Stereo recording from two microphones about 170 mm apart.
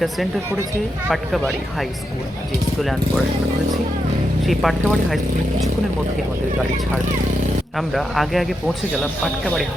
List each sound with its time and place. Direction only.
1.1 s speech: centre (ahead or behind)
4.4 s speech: centre (ahead or behind)
7.8 s speech: centre (ahead or behind)